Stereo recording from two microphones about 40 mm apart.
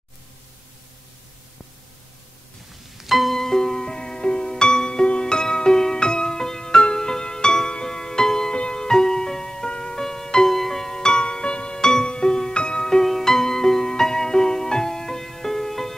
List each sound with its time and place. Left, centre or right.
3.0 s music: centre
3.3 s music: centre
11.0 s music: centre